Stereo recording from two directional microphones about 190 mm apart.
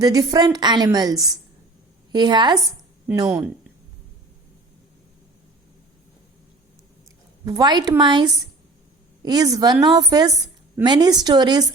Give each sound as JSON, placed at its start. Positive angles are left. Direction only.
{"t": 0.0, "sound": "a woman's voice", "side_deg": -20}
{"t": 3.2, "sound": "speech", "side_deg": -5}
{"t": 7.4, "sound": "a woman's voice", "side_deg": -20}